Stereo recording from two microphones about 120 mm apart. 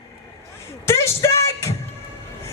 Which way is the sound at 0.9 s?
25° left (ahead or behind).